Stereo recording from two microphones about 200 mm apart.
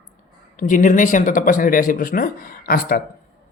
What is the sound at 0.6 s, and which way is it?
Speech, 40° left (ahead or behind).